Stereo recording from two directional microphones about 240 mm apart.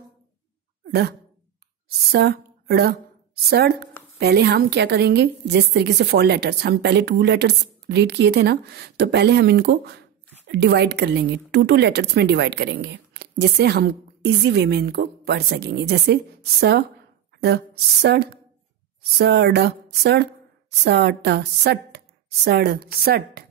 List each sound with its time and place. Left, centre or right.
0.8 s speech: right
2.1 s a woman's voice: right
18.0 s a woman's voice: right